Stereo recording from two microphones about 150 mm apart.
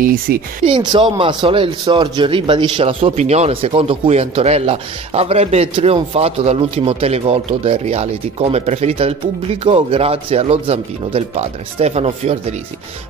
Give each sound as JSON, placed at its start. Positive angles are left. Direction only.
{"t": 0.0, "sound": "speech", "side_deg": -75}
{"t": 0.7, "sound": "speech", "side_deg": -35}